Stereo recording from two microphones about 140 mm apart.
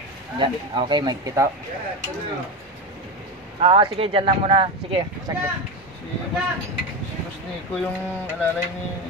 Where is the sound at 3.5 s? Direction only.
40° right (ahead or behind).